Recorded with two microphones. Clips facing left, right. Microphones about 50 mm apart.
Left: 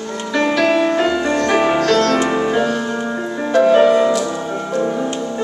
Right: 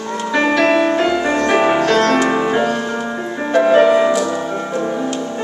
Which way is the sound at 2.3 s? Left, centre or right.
Centre.